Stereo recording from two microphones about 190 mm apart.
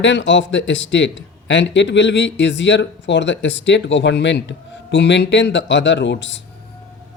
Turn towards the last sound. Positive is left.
turn(degrees=70)  # may be behind; listen again after turning